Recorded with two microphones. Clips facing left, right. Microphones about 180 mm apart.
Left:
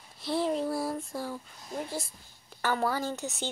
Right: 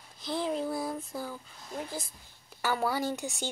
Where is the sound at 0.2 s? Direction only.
5° left (ahead or behind).